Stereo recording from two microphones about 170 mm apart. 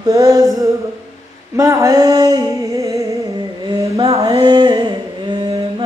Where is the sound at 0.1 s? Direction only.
20° right (ahead or behind).